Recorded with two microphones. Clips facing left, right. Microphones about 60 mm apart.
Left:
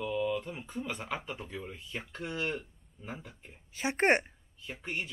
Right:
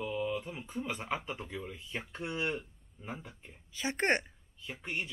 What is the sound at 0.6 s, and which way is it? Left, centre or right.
Speech, right.